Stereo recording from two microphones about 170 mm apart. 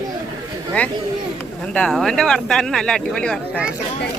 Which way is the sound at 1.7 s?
5° left (ahead or behind).